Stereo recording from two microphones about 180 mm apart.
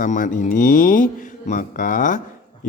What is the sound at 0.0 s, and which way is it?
Speech, 45° left (ahead or behind).